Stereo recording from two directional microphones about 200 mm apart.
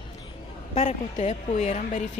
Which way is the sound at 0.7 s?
35° left (ahead or behind).